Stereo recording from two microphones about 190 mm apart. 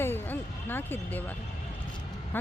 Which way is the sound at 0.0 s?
10° left (ahead or behind).